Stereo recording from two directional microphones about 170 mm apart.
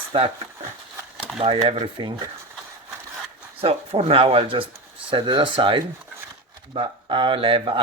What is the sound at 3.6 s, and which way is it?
Speech, 35° right (ahead or behind).